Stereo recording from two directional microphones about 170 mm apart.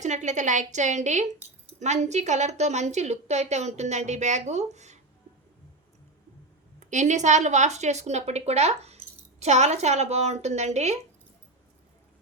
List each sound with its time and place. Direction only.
0.0 s a woman's voice: 45° right (ahead or behind)
6.7 s a woman's voice: 45° right (ahead or behind)